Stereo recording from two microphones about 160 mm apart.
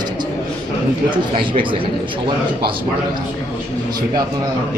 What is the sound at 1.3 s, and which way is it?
Speech, 30° right (ahead or behind).